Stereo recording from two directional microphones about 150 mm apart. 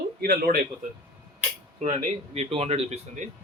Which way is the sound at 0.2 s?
75° right (ahead or behind).